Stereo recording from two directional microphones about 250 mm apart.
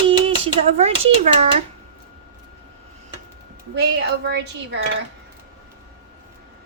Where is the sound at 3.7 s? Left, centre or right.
Right.